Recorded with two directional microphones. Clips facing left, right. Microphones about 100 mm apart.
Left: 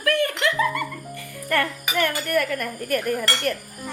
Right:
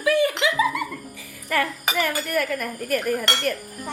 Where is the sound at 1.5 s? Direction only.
Centre (ahead or behind).